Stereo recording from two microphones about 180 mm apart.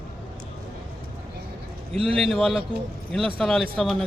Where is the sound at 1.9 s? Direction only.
30° right (ahead or behind).